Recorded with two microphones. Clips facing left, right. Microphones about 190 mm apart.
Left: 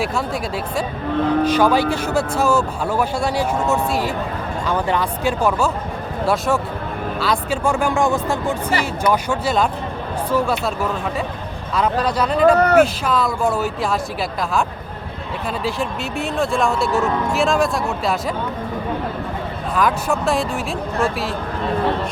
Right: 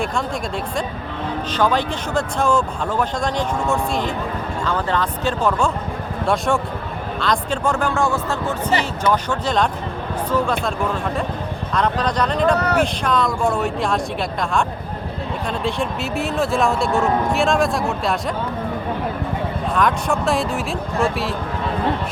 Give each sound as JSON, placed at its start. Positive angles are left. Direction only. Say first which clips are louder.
{"t": 1.5, "sound": "speech", "louder": "left 4 dB", "side_deg": 10}
{"t": 11.7, "sound": "speech", "louder": "left 2 dB", "side_deg": 5}
{"t": 12.5, "sound": "speech", "louder": "left 6 dB", "side_deg": 50}
{"t": 12.8, "sound": "speech", "louder": "left 2 dB", "side_deg": 5}
{"t": 15.6, "sound": "speech", "louder": "right 1 dB", "side_deg": 0}
{"t": 19.7, "sound": "speech", "louder": "left 1 dB", "side_deg": 5}